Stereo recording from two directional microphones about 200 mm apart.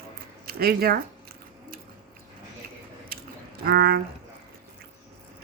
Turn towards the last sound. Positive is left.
turn(degrees=-50)  # may be behind; listen again after turning